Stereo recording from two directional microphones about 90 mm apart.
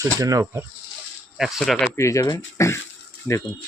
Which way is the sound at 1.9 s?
35° left (ahead or behind).